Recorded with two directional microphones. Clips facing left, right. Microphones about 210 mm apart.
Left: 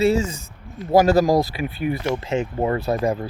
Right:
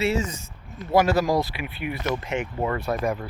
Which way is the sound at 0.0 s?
30° left (ahead or behind).